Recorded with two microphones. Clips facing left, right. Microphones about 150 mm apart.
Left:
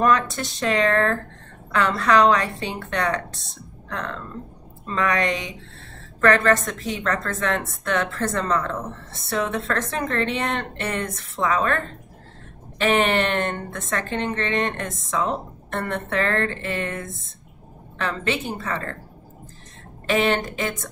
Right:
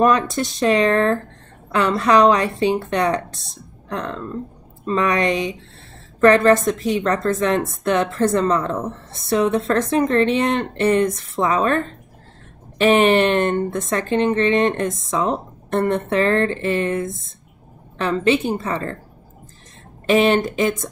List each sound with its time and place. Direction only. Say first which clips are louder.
0.0 s speech: right 4 dB; 20° right (ahead or behind)
17.9 s speech: right 8 dB; 20° right (ahead or behind)
20.1 s speech: right 6 dB; 20° right (ahead or behind)